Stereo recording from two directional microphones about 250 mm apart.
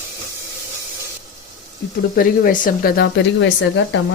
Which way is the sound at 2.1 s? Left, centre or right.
Left.